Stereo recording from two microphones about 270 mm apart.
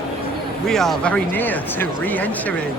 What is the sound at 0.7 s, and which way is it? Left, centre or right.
Speech, centre.